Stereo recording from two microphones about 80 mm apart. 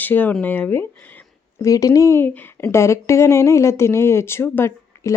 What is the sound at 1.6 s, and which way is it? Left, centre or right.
Speech, left.